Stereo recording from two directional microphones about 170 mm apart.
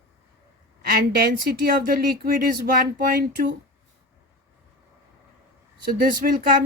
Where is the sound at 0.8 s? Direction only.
60° right (ahead or behind).